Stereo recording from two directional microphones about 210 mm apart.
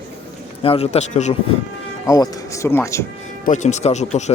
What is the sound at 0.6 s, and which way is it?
Speech, 25° left (ahead or behind).